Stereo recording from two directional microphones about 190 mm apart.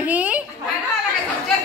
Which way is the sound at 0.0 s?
10° right (ahead or behind).